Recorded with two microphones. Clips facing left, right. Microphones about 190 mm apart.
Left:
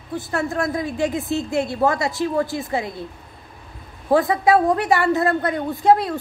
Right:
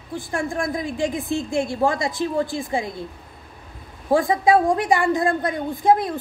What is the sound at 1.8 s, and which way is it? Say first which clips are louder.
Speech: left 1 dB; 15° right (ahead or behind).